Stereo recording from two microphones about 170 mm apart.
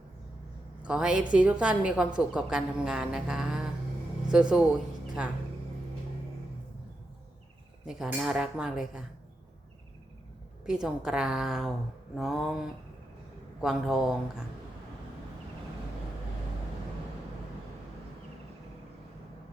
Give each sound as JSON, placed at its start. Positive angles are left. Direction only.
{"t": 0.8, "sound": "a woman's voice", "side_deg": -5}
{"t": 7.9, "sound": "a woman's voice", "side_deg": -5}
{"t": 10.7, "sound": "a woman's voice", "side_deg": -5}